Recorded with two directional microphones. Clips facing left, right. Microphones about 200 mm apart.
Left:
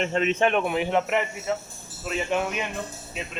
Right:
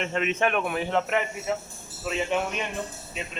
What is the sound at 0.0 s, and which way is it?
A man's voice, 30° left (ahead or behind).